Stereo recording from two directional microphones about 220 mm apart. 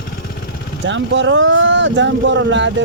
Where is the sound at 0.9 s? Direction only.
55° right (ahead or behind).